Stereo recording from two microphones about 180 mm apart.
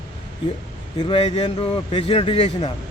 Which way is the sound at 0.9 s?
30° left (ahead or behind).